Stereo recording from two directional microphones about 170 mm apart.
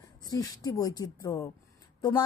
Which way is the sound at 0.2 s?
20° left (ahead or behind).